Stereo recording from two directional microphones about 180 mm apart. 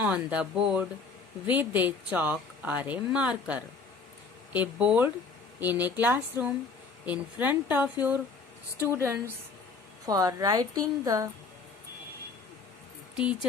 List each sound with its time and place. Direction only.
0.0 s speech: 5° right (ahead or behind)
8.9 s a woman's voice: 15° right (ahead or behind)
13.1 s speech: 5° right (ahead or behind)